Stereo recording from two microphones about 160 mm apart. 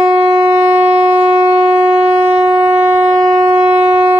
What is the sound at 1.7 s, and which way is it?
Shofar, 10° right (ahead or behind).